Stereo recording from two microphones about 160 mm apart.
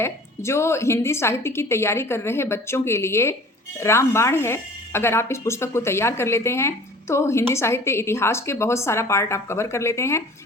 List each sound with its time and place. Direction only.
0.0 s speech: 15° left (ahead or behind)